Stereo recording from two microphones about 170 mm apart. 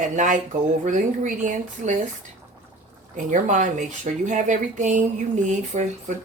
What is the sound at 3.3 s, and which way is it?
Speech, 45° right (ahead or behind).